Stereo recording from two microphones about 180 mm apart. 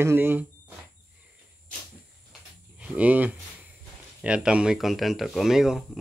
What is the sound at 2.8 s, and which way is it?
Speech, 10° right (ahead or behind).